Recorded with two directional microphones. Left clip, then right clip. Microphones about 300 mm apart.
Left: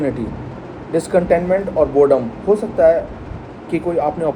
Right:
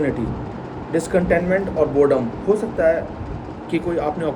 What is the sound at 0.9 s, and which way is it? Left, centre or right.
Speech, centre.